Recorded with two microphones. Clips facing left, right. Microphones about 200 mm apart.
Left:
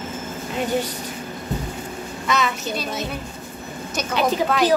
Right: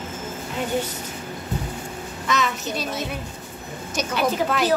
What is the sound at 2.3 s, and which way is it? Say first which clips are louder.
Child singing: left 1 dB; centre (ahead or behind).